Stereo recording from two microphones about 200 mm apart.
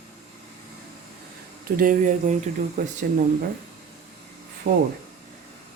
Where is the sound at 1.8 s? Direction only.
40° right (ahead or behind).